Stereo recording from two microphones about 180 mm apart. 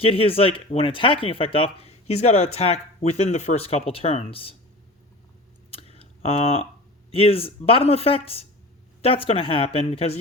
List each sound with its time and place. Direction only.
0.0 s speech: 30° left (ahead or behind)
5.7 s a sound: 35° left (ahead or behind)
7.1 s speech: 30° left (ahead or behind)